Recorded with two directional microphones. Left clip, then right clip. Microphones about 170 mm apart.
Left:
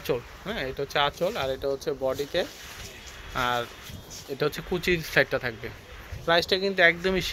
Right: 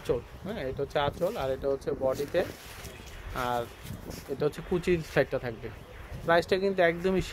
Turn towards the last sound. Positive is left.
turn(degrees=-10)  # may be behind; listen again after turning